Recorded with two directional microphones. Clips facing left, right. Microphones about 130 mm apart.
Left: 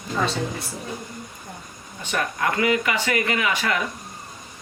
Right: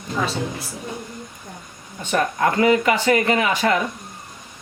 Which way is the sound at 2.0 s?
30° right (ahead or behind).